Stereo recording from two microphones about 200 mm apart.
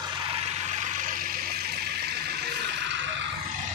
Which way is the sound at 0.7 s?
40° right (ahead or behind).